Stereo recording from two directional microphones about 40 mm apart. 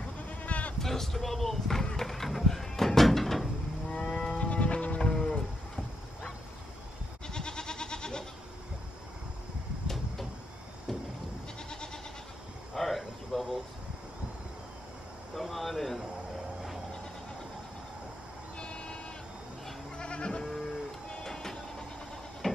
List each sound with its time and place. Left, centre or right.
0.0 s sheep: left
0.8 s basketball bounce: centre
2.0 s music: centre
4.0 s music: centre
4.4 s music: left
5.0 s livestock: left
7.2 s goat: centre
10.9 s sheep: centre
11.7 s goat: centre
12.7 s insect: centre
15.3 s a sound: centre
18.6 s sheep: left
20.0 s goat: left
21.3 s vehicle: centre